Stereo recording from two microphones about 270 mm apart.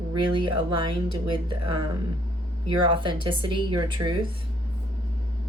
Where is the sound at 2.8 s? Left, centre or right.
Centre.